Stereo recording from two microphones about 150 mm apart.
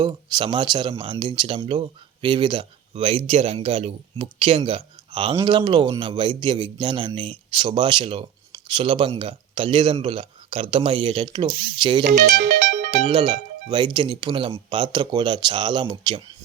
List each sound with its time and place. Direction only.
0.0 s a man's voice: 30° right (ahead or behind)
12.4 s music: 65° right (ahead or behind)
12.9 s a man's voice: 30° right (ahead or behind)